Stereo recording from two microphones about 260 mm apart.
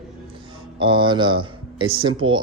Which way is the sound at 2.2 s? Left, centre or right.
Right.